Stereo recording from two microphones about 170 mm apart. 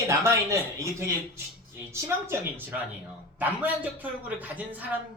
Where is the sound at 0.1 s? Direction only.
20° right (ahead or behind).